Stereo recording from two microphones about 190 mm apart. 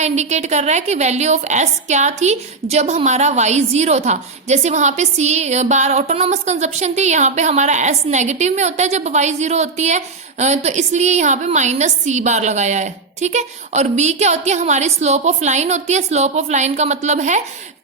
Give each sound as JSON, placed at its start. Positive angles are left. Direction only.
{"t": 0.0, "sound": "a woman's voice", "side_deg": -35}